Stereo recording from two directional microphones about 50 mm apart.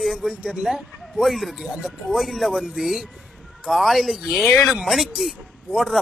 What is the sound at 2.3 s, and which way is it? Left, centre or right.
Speech, centre.